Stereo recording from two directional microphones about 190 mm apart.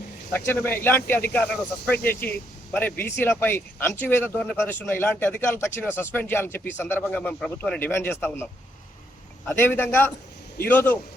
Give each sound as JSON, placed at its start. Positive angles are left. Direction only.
{"t": 0.3, "sound": "speech", "side_deg": 10}
{"t": 9.5, "sound": "speech", "side_deg": 10}